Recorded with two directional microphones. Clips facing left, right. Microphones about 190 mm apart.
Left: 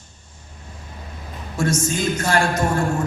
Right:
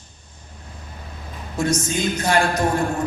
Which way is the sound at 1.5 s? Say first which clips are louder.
Even; 15° right (ahead or behind).